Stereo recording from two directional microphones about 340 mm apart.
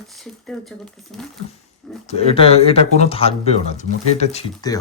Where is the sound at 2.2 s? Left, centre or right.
Centre.